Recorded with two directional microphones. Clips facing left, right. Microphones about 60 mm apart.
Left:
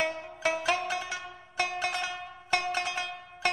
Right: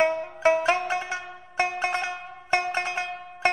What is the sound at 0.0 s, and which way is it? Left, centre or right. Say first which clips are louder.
Music: right 8 dB; right.